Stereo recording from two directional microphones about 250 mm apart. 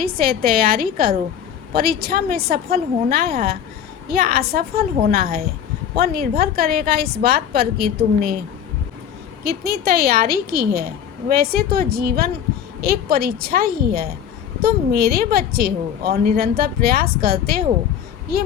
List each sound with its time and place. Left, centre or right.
0.0 s a woman's voice: right
9.4 s a woman's voice: right